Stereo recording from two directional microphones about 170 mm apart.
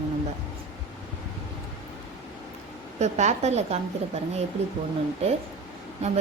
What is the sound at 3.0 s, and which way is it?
Speech, 40° right (ahead or behind).